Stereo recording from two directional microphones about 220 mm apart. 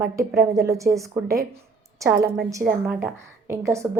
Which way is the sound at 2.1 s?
45° right (ahead or behind).